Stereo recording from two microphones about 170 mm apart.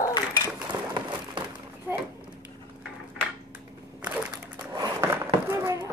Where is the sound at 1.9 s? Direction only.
15° right (ahead or behind).